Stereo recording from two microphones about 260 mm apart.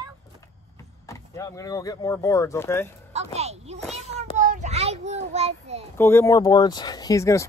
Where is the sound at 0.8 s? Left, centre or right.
Centre.